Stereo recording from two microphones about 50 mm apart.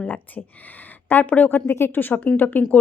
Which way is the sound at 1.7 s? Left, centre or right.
Left.